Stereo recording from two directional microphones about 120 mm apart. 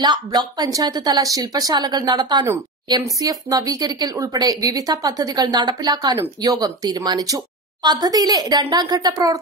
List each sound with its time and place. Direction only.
0.0 s a woman's voice: 35° right (ahead or behind)